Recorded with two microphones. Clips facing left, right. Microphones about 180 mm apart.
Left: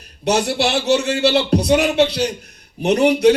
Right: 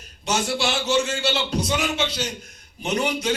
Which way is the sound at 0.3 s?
65° left (ahead or behind).